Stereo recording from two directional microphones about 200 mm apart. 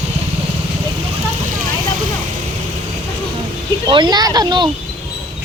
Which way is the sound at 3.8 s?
20° right (ahead or behind).